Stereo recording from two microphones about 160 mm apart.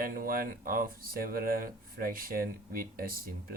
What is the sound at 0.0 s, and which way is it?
Speech, 65° right (ahead or behind).